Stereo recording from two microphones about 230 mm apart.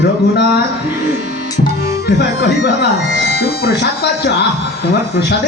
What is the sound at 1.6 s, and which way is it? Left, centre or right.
Speech, left.